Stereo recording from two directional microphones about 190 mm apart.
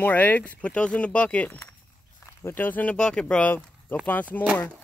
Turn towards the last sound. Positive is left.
turn(degrees=10)  # may be behind; listen again after turning